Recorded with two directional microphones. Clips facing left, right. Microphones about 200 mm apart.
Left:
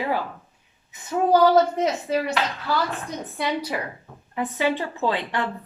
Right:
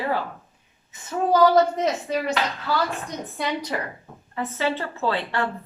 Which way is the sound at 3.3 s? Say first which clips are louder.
Left 1 dB; 10° left (ahead or behind).